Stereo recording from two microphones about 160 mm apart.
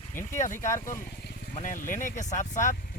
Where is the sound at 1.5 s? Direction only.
55° left (ahead or behind).